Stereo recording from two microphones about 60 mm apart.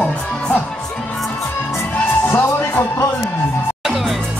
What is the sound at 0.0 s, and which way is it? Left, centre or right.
Music, centre.